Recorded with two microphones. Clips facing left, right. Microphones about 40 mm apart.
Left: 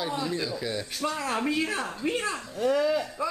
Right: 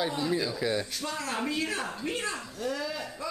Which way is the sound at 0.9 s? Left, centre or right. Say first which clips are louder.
Left 4 dB; centre.